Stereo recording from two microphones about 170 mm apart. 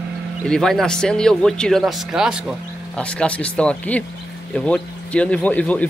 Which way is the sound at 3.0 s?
5° left (ahead or behind).